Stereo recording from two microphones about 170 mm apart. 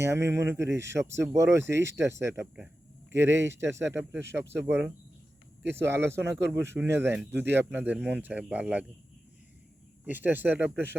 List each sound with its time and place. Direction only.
0.0 s speech: 15° right (ahead or behind)
10.1 s speech: 10° right (ahead or behind)